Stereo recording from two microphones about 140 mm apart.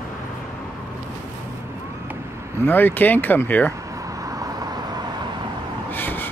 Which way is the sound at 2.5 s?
15° left (ahead or behind).